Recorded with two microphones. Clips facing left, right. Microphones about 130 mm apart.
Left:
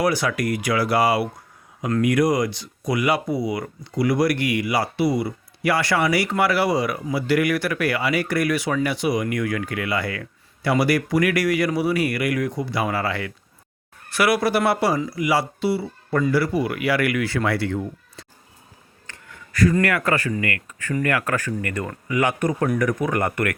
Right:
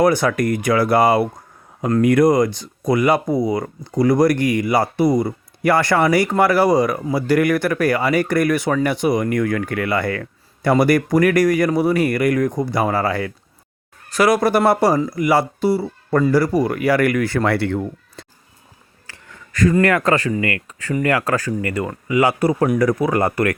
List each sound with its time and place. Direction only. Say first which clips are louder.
0.0 s speech: right 6 dB; 50° right (ahead or behind)
19.7 s a man's voice: right 5 dB; 35° right (ahead or behind); by 22.8 s 15° right (ahead or behind)
23.0 s speech: right 5 dB; 35° right (ahead or behind)